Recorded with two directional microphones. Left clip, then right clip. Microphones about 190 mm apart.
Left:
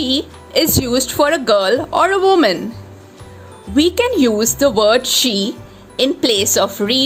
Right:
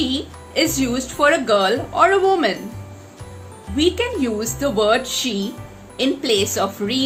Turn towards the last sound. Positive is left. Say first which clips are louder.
# left 6 dB
turn(degrees=55)  # may be behind; listen again after turning